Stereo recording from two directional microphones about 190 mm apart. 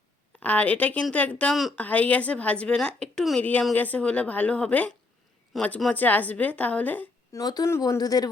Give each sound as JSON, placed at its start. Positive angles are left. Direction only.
{"t": 0.3, "sound": "speech", "side_deg": 5}